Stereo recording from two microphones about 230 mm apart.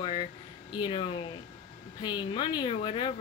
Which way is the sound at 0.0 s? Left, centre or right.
Left.